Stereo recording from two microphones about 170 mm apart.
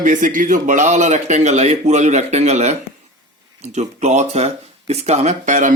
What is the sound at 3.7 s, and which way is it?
Speech, 45° right (ahead or behind).